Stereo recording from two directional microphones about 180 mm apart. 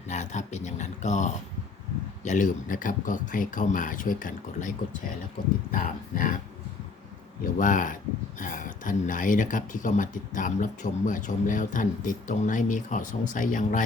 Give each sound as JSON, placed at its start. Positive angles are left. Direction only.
{"t": 0.1, "sound": "speech", "side_deg": 40}
{"t": 5.7, "sound": "speech", "side_deg": 50}
{"t": 7.6, "sound": "speech", "side_deg": 45}